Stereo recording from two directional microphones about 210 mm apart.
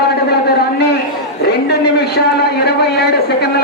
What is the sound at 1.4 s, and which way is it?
A man's voice, 50° left (ahead or behind).